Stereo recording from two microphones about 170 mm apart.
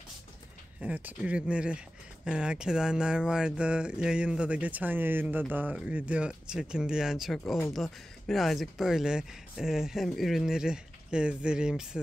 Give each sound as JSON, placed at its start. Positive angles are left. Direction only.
{"t": 0.7, "sound": "speech", "side_deg": -10}